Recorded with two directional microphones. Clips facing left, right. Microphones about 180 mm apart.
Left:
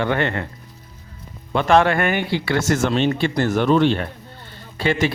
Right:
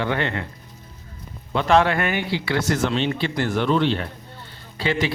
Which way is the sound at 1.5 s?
55° left (ahead or behind).